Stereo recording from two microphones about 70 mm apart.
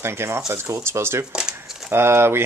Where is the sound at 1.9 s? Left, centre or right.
Right.